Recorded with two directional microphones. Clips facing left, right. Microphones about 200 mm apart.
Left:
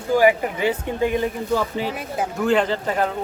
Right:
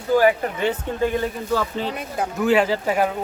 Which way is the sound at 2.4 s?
5° right (ahead or behind).